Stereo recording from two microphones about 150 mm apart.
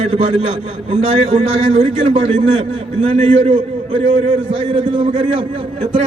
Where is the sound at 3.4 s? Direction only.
35° right (ahead or behind).